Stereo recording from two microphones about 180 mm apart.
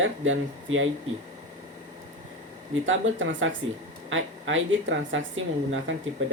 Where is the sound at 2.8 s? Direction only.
90° right.